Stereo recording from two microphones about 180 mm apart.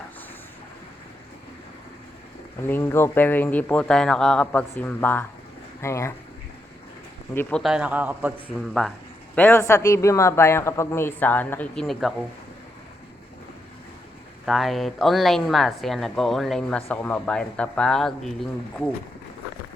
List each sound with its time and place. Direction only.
2.6 s a man's voice: 10° left (ahead or behind)
7.3 s a man's voice: centre (ahead or behind)
9.3 s a man's voice: 10° left (ahead or behind)
14.4 s speech: centre (ahead or behind)